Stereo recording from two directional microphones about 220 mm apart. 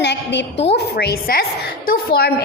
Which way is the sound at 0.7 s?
45° left (ahead or behind).